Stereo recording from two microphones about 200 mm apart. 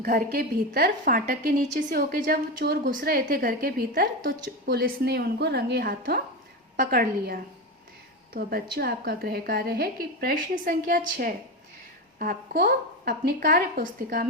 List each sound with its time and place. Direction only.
0.0 s a woman's voice: 45° right (ahead or behind)